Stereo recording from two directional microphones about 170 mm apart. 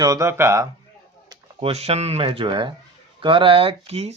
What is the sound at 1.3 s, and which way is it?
Speech, 35° right (ahead or behind).